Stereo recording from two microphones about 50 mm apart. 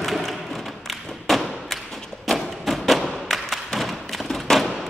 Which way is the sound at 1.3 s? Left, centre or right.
Centre.